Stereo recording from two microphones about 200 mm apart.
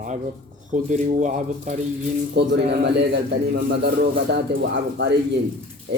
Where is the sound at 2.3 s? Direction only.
55° right (ahead or behind).